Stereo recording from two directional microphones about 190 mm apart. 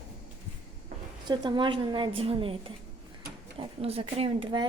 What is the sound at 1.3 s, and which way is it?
A woman's voice, 25° right (ahead or behind).